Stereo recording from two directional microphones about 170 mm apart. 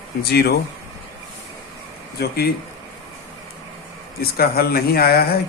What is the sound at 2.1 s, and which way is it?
Speech, 65° left (ahead or behind).